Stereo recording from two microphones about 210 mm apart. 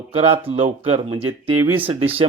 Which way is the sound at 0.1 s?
25° right (ahead or behind).